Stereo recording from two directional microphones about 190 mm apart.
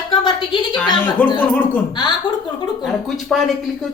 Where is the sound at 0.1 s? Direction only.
25° left (ahead or behind).